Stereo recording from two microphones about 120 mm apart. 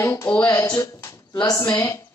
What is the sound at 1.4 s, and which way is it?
Speech, 30° left (ahead or behind).